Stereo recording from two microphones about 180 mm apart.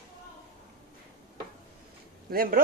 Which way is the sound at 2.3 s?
55° right (ahead or behind).